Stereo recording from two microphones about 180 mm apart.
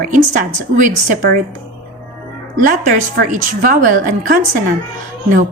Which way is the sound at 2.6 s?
50° right (ahead or behind).